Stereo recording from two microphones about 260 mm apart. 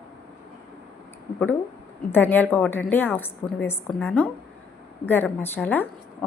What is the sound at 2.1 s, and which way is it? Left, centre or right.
A woman's voice, centre.